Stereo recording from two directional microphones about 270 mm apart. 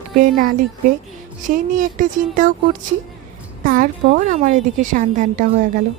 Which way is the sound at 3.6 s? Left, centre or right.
Right.